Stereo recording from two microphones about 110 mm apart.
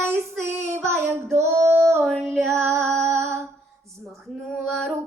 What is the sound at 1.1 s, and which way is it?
Female singing, 25° right (ahead or behind).